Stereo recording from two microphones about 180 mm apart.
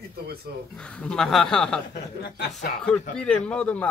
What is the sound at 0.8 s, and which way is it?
Speech, 5° left (ahead or behind).